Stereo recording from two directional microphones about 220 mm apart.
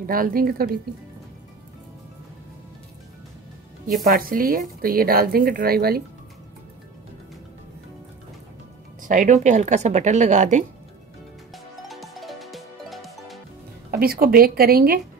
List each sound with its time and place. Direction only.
0.0 s a woman's voice: 40° right (ahead or behind)
4.0 s a woman's voice: 40° right (ahead or behind)
9.0 s a woman's voice: 35° right (ahead or behind)
11.5 s music: centre (ahead or behind)
13.8 s speech: 45° right (ahead or behind)